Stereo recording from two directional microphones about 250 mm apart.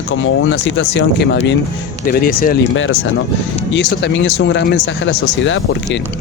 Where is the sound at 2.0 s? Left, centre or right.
Left.